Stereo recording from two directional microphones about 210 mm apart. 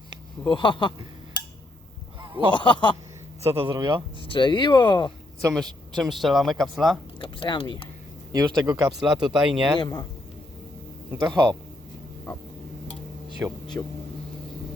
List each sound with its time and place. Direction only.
0.4 s speech: 25° left (ahead or behind)
2.5 s speech: 20° left (ahead or behind)
3.4 s speech: 25° right (ahead or behind)
4.4 s speech: 20° left (ahead or behind)
6.0 s speech: centre (ahead or behind)
7.2 s speech: 25° left (ahead or behind)
8.3 s speech: 20° right (ahead or behind)
9.0 s speech: 5° right (ahead or behind)
9.8 s speech: 20° left (ahead or behind)
11.2 s speech: 20° right (ahead or behind)
13.4 s speech: 10° right (ahead or behind)